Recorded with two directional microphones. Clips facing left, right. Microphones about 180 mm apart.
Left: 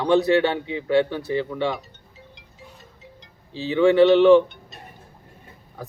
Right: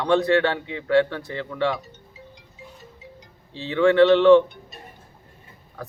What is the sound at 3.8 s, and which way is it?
Speech, 5° left (ahead or behind).